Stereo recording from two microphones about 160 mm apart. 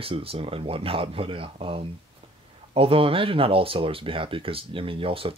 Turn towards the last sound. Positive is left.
turn(degrees=-35)  # may be behind; listen again after turning